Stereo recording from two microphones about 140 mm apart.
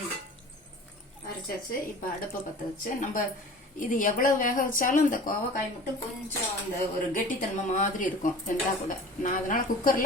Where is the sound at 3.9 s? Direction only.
75° left (ahead or behind).